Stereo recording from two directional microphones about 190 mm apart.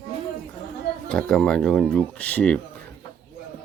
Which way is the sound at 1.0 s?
5° left (ahead or behind).